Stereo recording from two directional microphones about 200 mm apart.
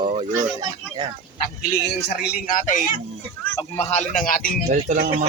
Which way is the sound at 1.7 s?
55° left (ahead or behind).